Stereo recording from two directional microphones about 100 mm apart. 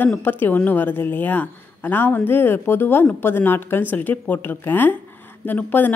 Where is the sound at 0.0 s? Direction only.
20° left (ahead or behind).